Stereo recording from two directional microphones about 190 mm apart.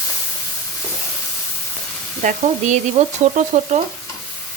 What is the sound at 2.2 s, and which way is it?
Frying, 40° right (ahead or behind).